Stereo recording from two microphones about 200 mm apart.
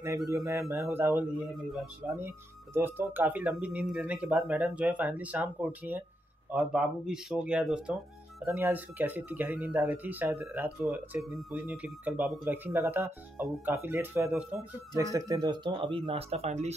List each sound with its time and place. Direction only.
0.5 s speech: 15° right (ahead or behind)
2.1 s speech: 10° right (ahead or behind)
15.1 s speech: 20° right (ahead or behind)